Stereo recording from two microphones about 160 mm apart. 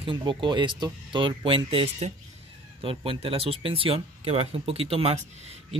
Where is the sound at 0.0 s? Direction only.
30° right (ahead or behind).